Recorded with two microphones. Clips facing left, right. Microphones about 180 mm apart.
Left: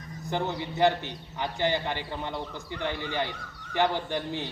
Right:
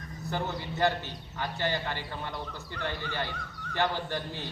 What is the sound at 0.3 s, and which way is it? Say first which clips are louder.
A man's voice: left 3 dB; 20° left (ahead or behind).